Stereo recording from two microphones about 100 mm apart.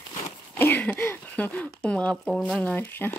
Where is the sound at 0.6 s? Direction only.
15° left (ahead or behind).